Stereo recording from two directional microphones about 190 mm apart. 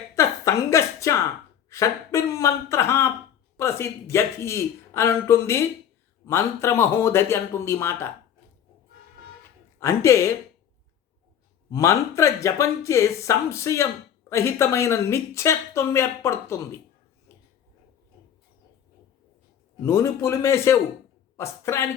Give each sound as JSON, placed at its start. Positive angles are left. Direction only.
{"t": 0.2, "sound": "a woman's voice", "side_deg": 15}
{"t": 9.8, "sound": "speech", "side_deg": 15}
{"t": 11.7, "sound": "speech", "side_deg": 15}
{"t": 19.8, "sound": "speech", "side_deg": 15}